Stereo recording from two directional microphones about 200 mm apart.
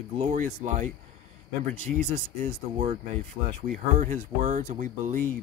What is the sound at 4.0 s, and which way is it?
Speech, 40° right (ahead or behind).